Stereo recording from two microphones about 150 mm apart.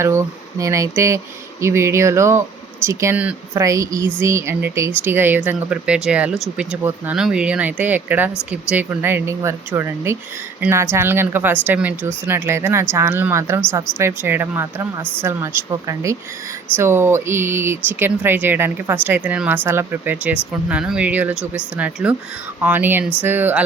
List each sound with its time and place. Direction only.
0.0 s speech: 20° right (ahead or behind)